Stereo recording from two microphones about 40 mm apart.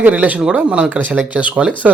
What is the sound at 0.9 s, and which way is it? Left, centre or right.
Speech, right.